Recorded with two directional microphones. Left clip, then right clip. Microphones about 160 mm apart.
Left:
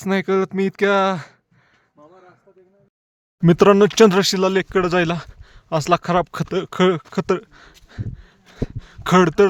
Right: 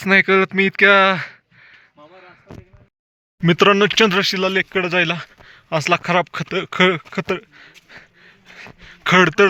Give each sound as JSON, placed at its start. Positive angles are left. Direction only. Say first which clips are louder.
{"t": 0.0, "sound": "speech", "louder": "right 6 dB", "side_deg": 20}
{"t": 3.4, "sound": "speech", "louder": "left 1 dB", "side_deg": 45}
{"t": 5.5, "sound": "speech", "louder": "even", "side_deg": 35}
{"t": 6.5, "sound": "speech", "louder": "right 2 dB", "side_deg": 30}
{"t": 7.1, "sound": "speech", "louder": "left 2 dB", "side_deg": 40}
{"t": 7.9, "sound": "a sound", "louder": "left 1 dB", "side_deg": 35}